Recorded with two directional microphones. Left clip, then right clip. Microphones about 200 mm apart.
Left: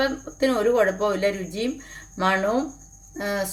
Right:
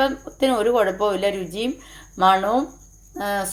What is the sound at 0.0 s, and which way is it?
Speech, 10° right (ahead or behind).